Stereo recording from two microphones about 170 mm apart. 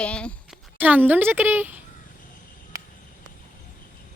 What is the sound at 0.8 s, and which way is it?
A woman's voice, 10° right (ahead or behind).